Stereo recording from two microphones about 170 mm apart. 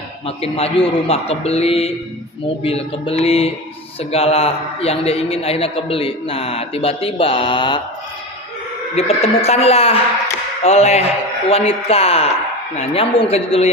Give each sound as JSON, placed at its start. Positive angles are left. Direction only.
{"t": 0.3, "sound": "a man's voice", "side_deg": 35}
{"t": 9.0, "sound": "a man's voice", "side_deg": 40}